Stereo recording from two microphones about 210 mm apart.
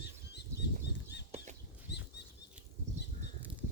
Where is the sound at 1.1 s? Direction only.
55° left (ahead or behind).